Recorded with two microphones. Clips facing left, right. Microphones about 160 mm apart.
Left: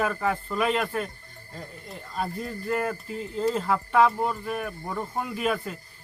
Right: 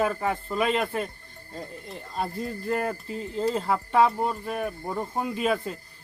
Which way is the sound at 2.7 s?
30° right (ahead or behind).